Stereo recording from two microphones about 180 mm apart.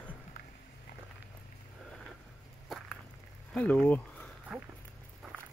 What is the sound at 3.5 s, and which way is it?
Speech, 5° left (ahead or behind).